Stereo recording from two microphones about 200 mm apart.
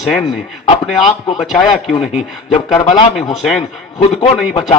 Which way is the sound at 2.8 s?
25° left (ahead or behind).